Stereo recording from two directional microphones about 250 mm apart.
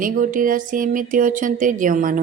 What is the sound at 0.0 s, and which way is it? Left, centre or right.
Speech, right.